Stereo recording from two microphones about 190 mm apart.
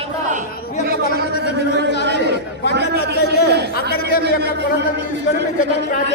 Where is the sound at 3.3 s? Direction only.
60° right (ahead or behind).